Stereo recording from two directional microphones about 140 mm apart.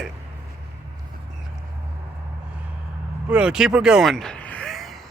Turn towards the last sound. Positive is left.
turn(degrees=0)  # may be behind; listen again after turning